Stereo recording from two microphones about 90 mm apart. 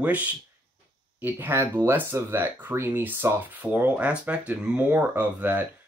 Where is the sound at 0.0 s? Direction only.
15° right (ahead or behind).